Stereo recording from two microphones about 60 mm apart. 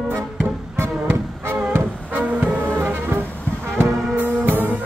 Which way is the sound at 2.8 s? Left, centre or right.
Right.